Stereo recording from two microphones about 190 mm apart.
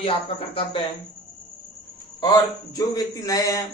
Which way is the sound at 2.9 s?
20° left (ahead or behind).